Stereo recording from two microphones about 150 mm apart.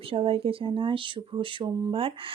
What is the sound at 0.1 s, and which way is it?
Speech, 40° right (ahead or behind).